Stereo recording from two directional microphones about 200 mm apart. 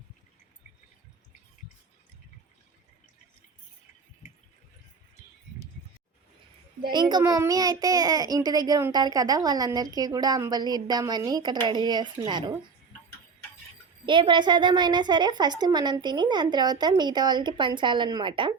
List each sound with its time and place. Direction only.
4.2 s a sound: 35° left (ahead or behind)
6.9 s a child's voice: 20° right (ahead or behind)
14.0 s a child's voice: 25° right (ahead or behind)